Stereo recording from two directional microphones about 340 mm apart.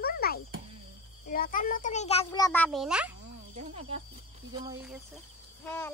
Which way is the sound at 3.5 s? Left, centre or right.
Centre.